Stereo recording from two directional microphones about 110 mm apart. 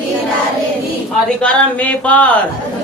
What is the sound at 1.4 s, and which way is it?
Speech, 15° left (ahead or behind).